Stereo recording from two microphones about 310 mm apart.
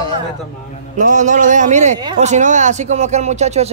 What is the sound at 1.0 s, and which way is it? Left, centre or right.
A woman's voice, right.